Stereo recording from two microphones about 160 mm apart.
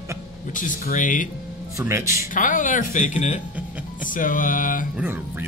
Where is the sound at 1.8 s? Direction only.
15° right (ahead or behind).